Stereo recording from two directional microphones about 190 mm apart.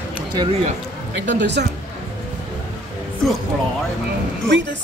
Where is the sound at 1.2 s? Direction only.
65° right (ahead or behind).